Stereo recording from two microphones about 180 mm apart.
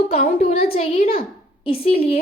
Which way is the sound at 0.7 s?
35° left (ahead or behind).